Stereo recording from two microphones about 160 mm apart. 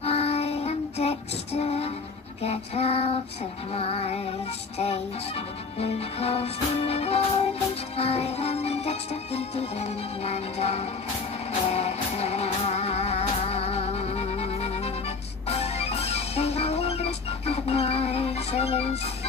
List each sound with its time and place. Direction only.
0.0 s child singing: 40° left (ahead or behind)
2.4 s speech: 40° left (ahead or behind)
7.9 s music: 40° left (ahead or behind)